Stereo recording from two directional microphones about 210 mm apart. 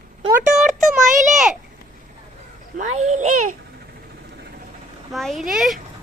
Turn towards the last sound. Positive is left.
turn(degrees=0)  # may be behind; listen again after turning